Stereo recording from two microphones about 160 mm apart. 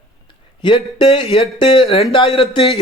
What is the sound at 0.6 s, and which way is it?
A man's voice, 30° left (ahead or behind).